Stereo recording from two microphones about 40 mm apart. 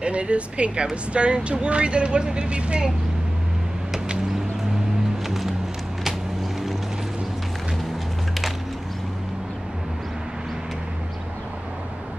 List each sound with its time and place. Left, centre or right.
0.0 s speech: right
5.2 s music: centre